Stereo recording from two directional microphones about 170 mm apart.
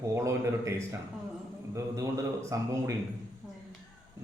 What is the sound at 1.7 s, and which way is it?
A man's voice, 20° right (ahead or behind).